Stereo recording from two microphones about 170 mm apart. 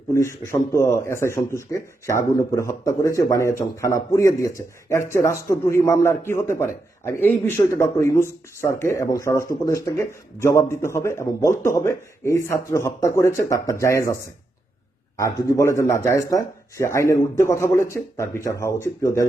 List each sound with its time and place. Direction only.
0.1 s speech: 15° left (ahead or behind)